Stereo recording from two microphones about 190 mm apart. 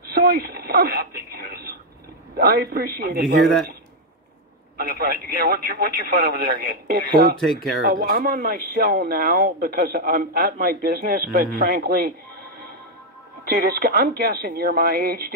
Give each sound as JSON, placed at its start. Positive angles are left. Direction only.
{"t": 0.1, "sound": "a sound", "side_deg": -55}
{"t": 2.3, "sound": "speech", "side_deg": -55}
{"t": 4.7, "sound": "speech", "side_deg": -50}
{"t": 7.3, "sound": "speech", "side_deg": 0}
{"t": 7.8, "sound": "speech", "side_deg": -50}
{"t": 13.6, "sound": "speech", "side_deg": -55}